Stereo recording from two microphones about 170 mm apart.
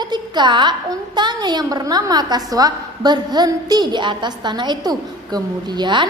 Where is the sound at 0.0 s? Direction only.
25° right (ahead or behind).